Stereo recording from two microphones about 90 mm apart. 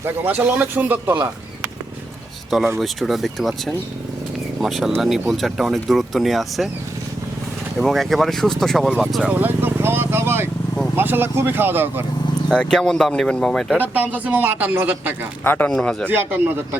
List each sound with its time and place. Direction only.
0.3 s speech: 20° right (ahead or behind)
2.7 s speech: centre (ahead or behind)
7.8 s speech: centre (ahead or behind)
9.2 s speech: 20° right (ahead or behind)
12.5 s speech: 10° left (ahead or behind)
13.7 s speech: 20° right (ahead or behind)
15.4 s speech: 20° left (ahead or behind)
15.7 s speech: 10° left (ahead or behind)
16.0 s speech: 25° right (ahead or behind)